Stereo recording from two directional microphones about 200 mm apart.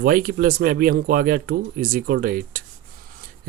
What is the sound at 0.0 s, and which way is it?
Speech, 45° right (ahead or behind).